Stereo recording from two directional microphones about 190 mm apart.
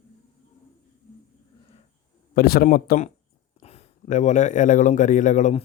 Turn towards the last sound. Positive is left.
turn(degrees=40)  # may be behind; listen again after turning